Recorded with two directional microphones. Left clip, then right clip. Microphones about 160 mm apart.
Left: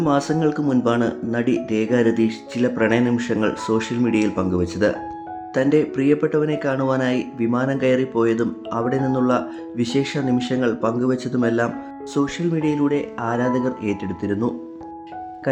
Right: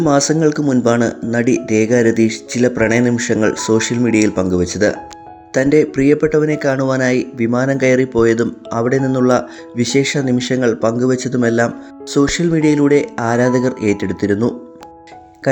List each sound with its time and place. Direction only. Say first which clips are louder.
0.0 s speech: right 6 dB; 30° right (ahead or behind)